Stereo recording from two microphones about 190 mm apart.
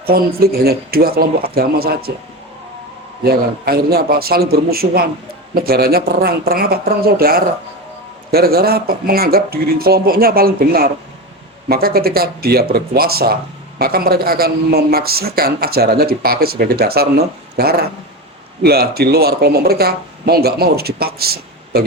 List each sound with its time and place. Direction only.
0.0 s speech: 55° right (ahead or behind)
3.2 s speech: 55° right (ahead or behind)